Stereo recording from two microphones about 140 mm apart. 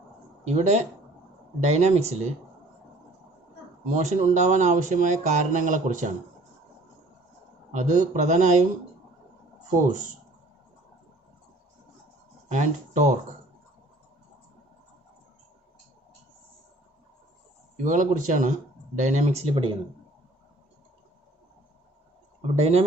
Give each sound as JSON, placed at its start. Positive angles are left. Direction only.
{"t": 0.4, "sound": "speech", "side_deg": -55}
{"t": 3.8, "sound": "speech", "side_deg": -55}
{"t": 7.7, "sound": "speech", "side_deg": -60}
{"t": 12.5, "sound": "speech", "side_deg": -60}
{"t": 17.8, "sound": "speech", "side_deg": -65}
{"t": 22.4, "sound": "speech", "side_deg": -50}